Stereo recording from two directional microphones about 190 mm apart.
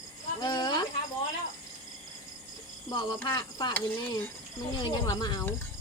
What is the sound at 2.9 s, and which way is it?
Speech, 20° left (ahead or behind).